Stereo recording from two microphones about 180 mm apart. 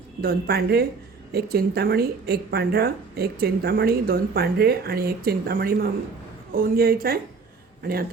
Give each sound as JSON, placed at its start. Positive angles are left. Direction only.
{"t": 0.2, "sound": "speech", "side_deg": -55}